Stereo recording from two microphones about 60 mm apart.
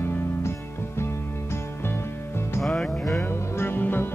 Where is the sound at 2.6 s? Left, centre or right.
Centre.